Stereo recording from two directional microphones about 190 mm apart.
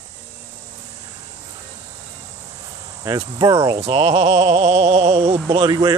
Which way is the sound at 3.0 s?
20° right (ahead or behind).